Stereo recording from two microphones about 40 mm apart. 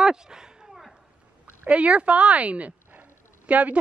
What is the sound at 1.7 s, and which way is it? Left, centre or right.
A woman's voice, right.